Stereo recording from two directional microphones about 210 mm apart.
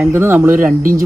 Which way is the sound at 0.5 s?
40° right (ahead or behind).